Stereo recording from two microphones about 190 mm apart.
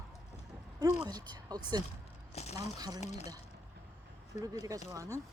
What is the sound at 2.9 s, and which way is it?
Speech, 35° left (ahead or behind).